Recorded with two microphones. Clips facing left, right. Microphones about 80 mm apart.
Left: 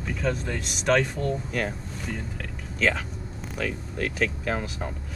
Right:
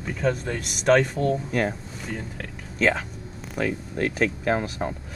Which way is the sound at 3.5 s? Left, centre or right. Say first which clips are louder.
Right 4 dB; right.